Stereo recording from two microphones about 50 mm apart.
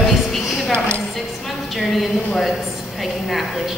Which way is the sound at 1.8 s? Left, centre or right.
Centre.